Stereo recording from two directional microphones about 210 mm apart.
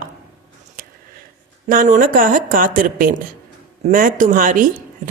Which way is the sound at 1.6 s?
40° right (ahead or behind).